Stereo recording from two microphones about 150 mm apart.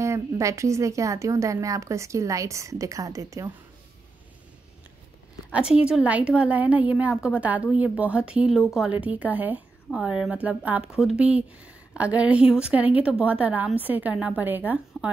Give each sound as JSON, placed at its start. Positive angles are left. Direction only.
{"t": 0.0, "sound": "speech", "side_deg": -20}
{"t": 5.5, "sound": "speech", "side_deg": -5}